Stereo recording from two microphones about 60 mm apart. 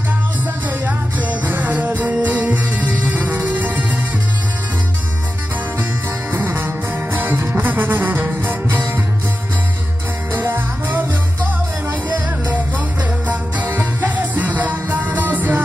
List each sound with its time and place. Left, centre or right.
1.4 s music: right
6.3 s music: right
10.3 s music: right
13.3 s music: right